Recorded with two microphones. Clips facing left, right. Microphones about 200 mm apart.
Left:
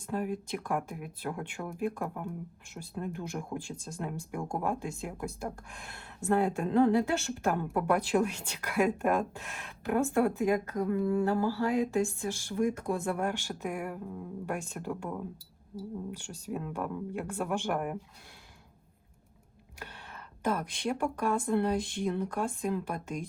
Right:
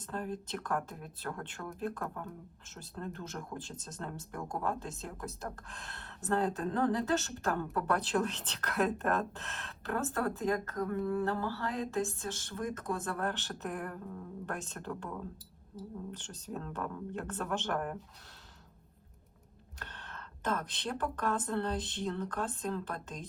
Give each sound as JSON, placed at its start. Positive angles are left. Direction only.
{"t": 0.0, "sound": "speech", "side_deg": 10}
{"t": 19.8, "sound": "speech", "side_deg": 10}